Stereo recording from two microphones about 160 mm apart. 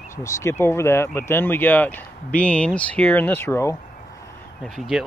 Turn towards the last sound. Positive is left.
turn(degrees=0)  # may be behind; listen again after turning